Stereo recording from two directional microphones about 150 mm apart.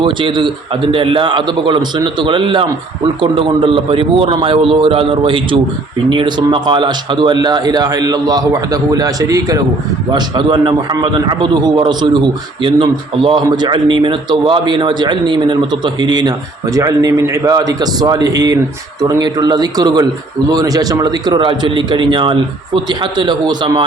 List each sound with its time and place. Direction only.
0.0 s a man's voice: 35° right (ahead or behind)